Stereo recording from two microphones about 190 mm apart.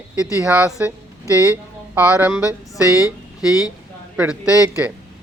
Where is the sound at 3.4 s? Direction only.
5° right (ahead or behind).